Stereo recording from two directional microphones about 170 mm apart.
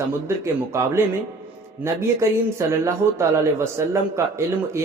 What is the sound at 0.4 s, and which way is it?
Speech, 15° right (ahead or behind).